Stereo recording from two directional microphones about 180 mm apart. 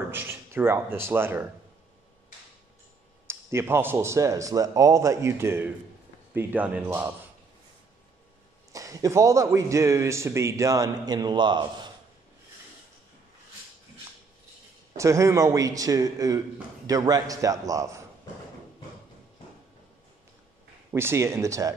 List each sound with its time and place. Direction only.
0.1 s speech: 10° right (ahead or behind)
3.3 s a man's voice: 15° right (ahead or behind)
8.7 s a man's voice: 20° right (ahead or behind)
15.0 s a man's voice: 15° right (ahead or behind)
20.9 s a man's voice: 15° right (ahead or behind)